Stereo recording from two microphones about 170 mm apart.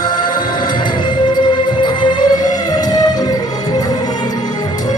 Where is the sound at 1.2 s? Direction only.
25° left (ahead or behind).